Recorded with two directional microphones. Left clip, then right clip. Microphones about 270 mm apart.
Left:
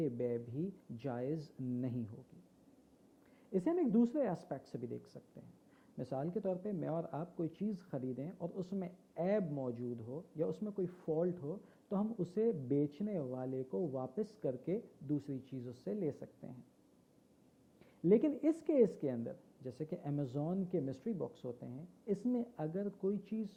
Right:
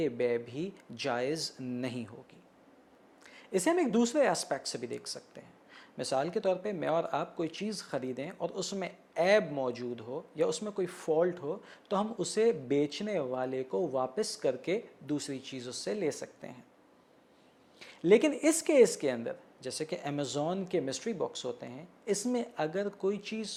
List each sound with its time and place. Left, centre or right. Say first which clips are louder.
0.0 s speech: right 8 dB; centre
3.5 s speech: right 6 dB; centre
13.7 s a man's voice: right 8 dB; right
14.2 s speech: right 8 dB; centre
17.7 s speech: right 7 dB; centre